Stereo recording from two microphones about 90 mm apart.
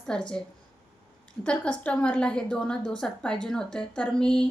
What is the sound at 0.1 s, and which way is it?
Speech, 10° left (ahead or behind).